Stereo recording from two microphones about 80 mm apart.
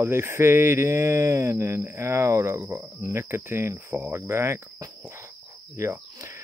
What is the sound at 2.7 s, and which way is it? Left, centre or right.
Speech, right.